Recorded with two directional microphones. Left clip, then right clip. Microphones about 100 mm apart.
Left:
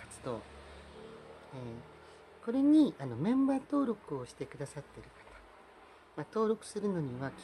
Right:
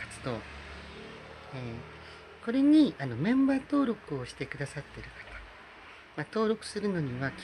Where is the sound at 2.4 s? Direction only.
30° left (ahead or behind).